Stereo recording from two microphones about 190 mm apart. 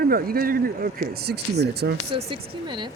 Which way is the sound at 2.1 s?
25° right (ahead or behind).